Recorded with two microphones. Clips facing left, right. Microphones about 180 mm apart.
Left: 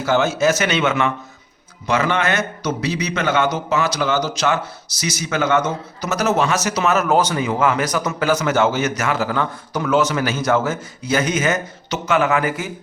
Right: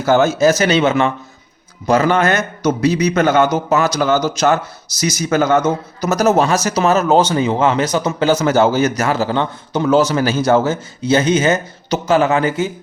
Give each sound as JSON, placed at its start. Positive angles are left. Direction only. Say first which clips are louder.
{"t": 0.0, "sound": "a man's voice", "louder": "right 5 dB", "side_deg": -45}